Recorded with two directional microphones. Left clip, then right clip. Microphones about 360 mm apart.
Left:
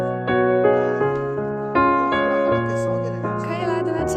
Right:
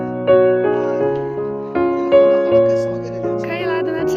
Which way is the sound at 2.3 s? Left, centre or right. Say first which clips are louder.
Right 7 dB; left.